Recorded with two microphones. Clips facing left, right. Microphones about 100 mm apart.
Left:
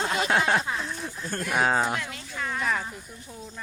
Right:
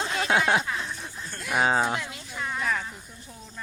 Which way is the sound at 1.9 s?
20° right (ahead or behind).